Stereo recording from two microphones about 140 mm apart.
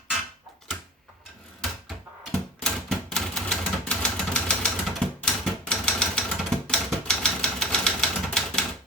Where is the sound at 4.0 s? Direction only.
5° left (ahead or behind).